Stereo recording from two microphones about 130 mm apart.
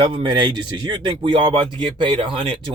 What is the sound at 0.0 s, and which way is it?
Speech, 40° right (ahead or behind).